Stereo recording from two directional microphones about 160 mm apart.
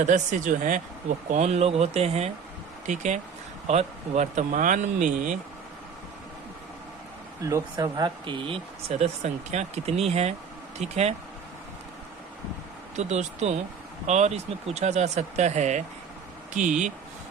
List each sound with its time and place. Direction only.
0.0 s speech: 50° right (ahead or behind)
1.3 s speech: 45° right (ahead or behind)
7.4 s speech: 20° right (ahead or behind); by 11.1 s 40° right (ahead or behind)
13.0 s speech: 45° right (ahead or behind)